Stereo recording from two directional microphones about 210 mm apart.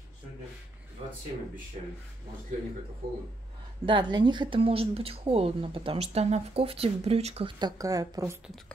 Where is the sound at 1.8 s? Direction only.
30° right (ahead or behind).